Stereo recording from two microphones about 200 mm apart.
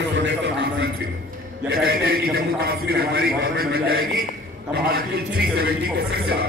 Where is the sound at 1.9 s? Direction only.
50° right (ahead or behind).